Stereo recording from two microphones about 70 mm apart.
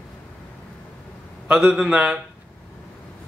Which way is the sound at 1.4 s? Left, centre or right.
Centre.